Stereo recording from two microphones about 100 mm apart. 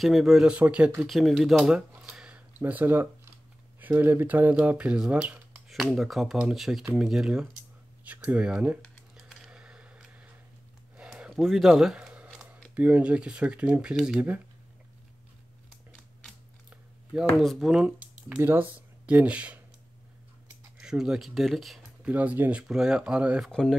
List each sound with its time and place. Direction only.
0.0 s speech: centre (ahead or behind)
1.0 s speech: centre (ahead or behind)
8.0 s a sound: 15° right (ahead or behind)
12.7 s speech: 15° right (ahead or behind)
17.4 s speech: centre (ahead or behind)
20.8 s speech: 5° right (ahead or behind)
22.0 s speech: 15° right (ahead or behind)
23.4 s speech: 5° left (ahead or behind)